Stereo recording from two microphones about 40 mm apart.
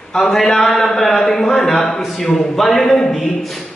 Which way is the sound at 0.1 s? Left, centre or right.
Centre.